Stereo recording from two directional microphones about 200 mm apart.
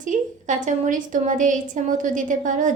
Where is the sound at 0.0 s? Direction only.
40° right (ahead or behind).